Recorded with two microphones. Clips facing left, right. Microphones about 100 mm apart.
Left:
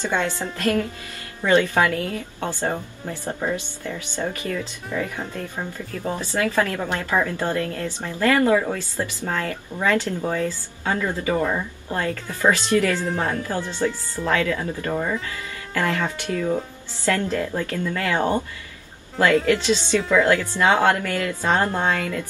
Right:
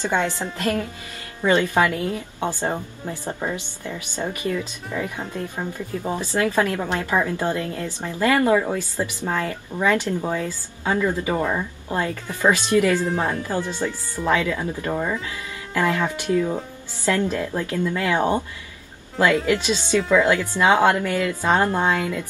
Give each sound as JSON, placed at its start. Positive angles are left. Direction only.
{"t": 0.0, "sound": "a woman's voice", "side_deg": -15}
{"t": 13.0, "sound": "speech", "side_deg": -5}
{"t": 13.4, "sound": "speech", "side_deg": -15}
{"t": 15.0, "sound": "speech", "side_deg": -5}
{"t": 15.2, "sound": "speech", "side_deg": -15}